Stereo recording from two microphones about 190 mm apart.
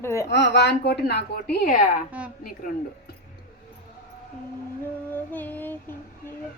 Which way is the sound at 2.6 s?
45° left (ahead or behind).